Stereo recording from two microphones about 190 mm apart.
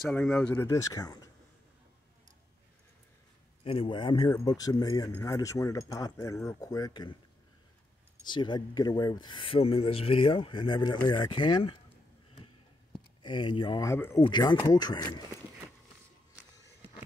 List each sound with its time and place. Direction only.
0.1 s speech: 5° left (ahead or behind)
3.6 s speech: 30° left (ahead or behind)
8.2 s speech: 25° left (ahead or behind)
13.2 s speech: 25° left (ahead or behind)